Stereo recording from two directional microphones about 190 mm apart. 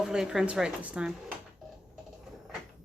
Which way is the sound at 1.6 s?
Centre (ahead or behind).